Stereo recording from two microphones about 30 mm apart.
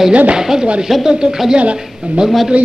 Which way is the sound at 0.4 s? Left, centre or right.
Centre.